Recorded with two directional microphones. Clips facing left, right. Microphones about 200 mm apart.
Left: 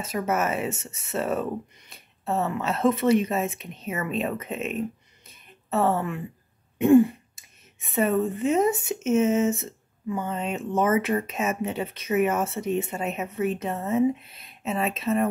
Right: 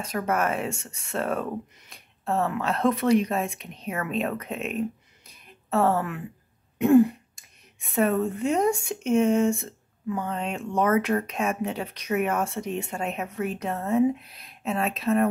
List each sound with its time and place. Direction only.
0.0 s speech: 5° left (ahead or behind)